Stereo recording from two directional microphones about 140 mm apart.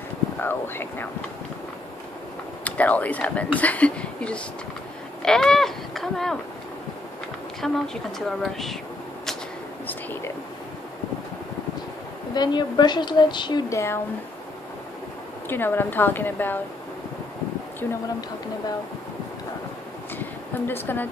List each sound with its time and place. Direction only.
0.4 s speech: 15° left (ahead or behind)
2.6 s speech: 10° left (ahead or behind)
7.6 s a woman's voice: 5° left (ahead or behind)
12.4 s a woman's voice: 30° left (ahead or behind)
15.4 s speech: 15° left (ahead or behind)
20.2 s a sound: 15° left (ahead or behind)